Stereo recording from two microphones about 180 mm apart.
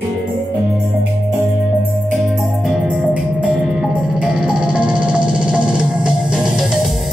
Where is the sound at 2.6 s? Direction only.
Centre (ahead or behind).